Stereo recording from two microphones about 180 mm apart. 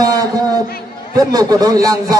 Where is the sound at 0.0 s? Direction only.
20° right (ahead or behind).